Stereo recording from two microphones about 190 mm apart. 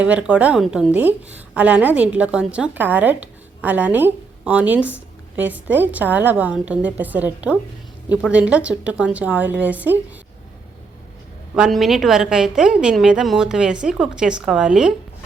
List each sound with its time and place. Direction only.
0.0 s a woman's voice: 5° right (ahead or behind)
11.5 s a woman's voice: centre (ahead or behind)